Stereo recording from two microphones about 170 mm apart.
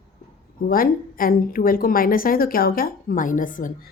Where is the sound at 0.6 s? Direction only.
60° left (ahead or behind).